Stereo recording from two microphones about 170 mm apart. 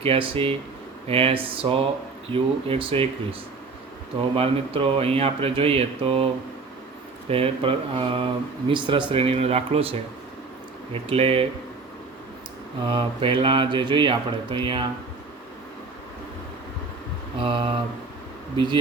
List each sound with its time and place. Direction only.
0.0 s speech: 35° right (ahead or behind)
4.4 s speech: 35° right (ahead or behind)
7.3 s speech: 35° right (ahead or behind)
10.9 s speech: 35° right (ahead or behind)
12.8 s speech: 30° right (ahead or behind)
17.4 s speech: 30° right (ahead or behind)